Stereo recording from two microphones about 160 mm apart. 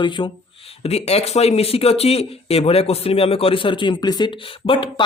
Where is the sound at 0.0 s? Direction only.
30° left (ahead or behind).